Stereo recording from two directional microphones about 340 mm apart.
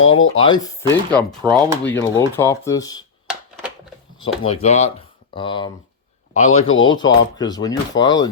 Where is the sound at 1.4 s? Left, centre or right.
Centre.